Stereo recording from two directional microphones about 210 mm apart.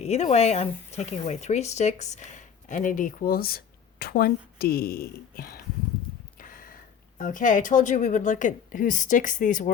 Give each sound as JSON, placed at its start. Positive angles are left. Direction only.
{"t": 0.0, "sound": "speech", "side_deg": 30}
{"t": 6.4, "sound": "a sound", "side_deg": 40}
{"t": 7.2, "sound": "speech", "side_deg": 40}